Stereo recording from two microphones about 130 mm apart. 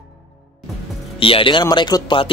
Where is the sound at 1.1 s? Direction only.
45° left (ahead or behind).